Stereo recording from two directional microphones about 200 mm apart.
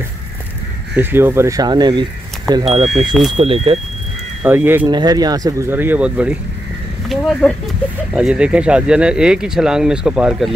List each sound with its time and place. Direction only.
0.9 s speech: 10° right (ahead or behind)
4.4 s speech: 10° right (ahead or behind)